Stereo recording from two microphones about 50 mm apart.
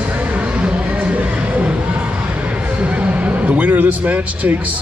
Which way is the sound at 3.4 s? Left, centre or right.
Right.